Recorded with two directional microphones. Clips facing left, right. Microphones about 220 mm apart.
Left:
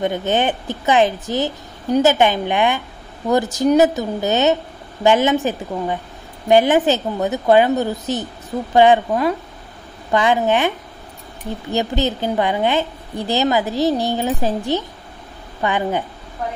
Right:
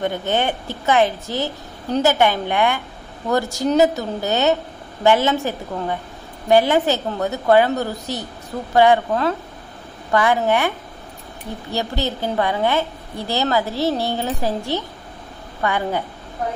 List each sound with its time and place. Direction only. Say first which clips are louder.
0.0 s a woman's voice: left 2 dB; 15° left (ahead or behind)
11.7 s a woman's voice: left 4 dB; 20° left (ahead or behind)